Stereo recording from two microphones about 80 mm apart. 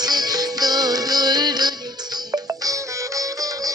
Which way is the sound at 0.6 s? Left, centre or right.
Right.